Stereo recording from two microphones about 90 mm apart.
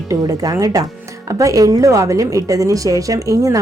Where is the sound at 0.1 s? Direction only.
40° right (ahead or behind).